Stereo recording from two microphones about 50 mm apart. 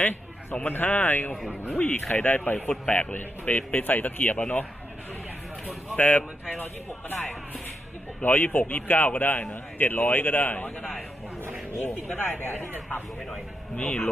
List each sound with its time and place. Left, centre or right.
0.7 s a man's voice: left
6.0 s a man's voice: left
8.2 s a man's voice: left
12.1 s a man's voice: left
13.7 s a man's voice: left